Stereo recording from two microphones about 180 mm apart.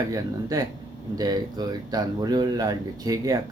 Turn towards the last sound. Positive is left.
turn(degrees=-20)  # may be behind; listen again after turning